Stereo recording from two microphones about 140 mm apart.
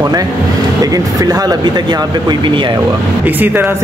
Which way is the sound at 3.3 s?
15° right (ahead or behind).